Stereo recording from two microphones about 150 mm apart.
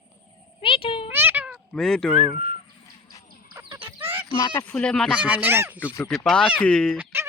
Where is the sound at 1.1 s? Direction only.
15° right (ahead or behind).